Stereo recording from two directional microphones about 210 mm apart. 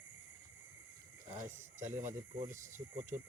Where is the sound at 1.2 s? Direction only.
35° right (ahead or behind).